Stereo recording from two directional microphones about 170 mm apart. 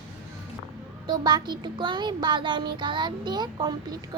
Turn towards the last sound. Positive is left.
turn(degrees=-25)  # may be behind; listen again after turning